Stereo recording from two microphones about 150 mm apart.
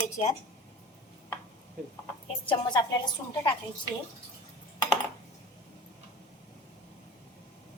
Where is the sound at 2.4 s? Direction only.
30° left (ahead or behind).